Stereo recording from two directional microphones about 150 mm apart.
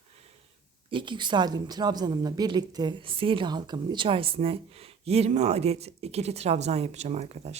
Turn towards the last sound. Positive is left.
turn(degrees=-45)  # may be behind; listen again after turning